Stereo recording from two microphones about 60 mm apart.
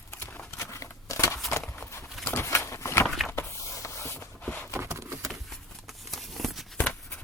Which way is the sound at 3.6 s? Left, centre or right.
Left.